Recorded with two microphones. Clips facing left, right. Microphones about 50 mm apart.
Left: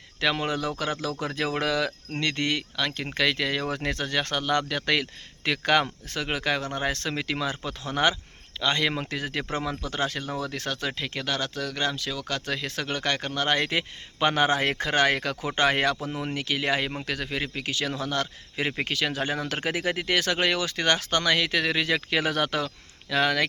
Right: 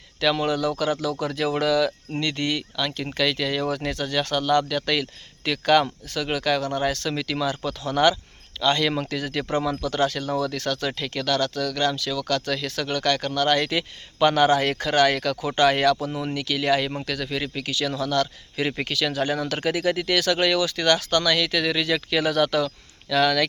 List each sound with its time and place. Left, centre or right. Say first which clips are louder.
0.2 s speech: right 4 dB; left